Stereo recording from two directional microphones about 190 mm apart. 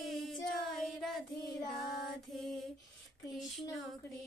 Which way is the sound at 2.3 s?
Centre (ahead or behind).